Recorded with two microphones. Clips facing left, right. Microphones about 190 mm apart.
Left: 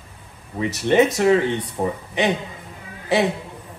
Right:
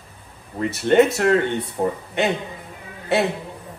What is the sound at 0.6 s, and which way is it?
Speech, centre (ahead or behind).